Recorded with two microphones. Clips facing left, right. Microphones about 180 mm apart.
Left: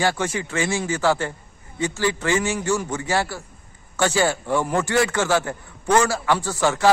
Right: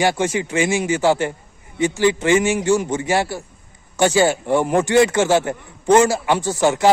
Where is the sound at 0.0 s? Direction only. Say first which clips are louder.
Right 4 dB; 20° right (ahead or behind).